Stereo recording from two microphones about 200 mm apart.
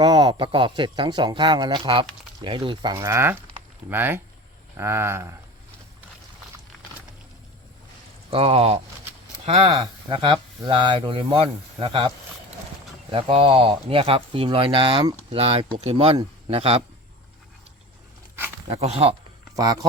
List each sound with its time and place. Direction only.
0.0 s speech: 20° right (ahead or behind)
8.3 s speech: 30° right (ahead or behind)
18.7 s speech: 30° right (ahead or behind)
19.5 s speech: 20° right (ahead or behind)